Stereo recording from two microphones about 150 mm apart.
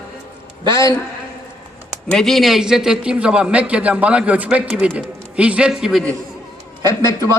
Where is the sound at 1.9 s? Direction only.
5° left (ahead or behind).